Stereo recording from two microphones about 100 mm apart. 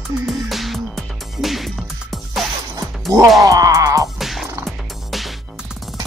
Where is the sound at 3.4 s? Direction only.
35° right (ahead or behind).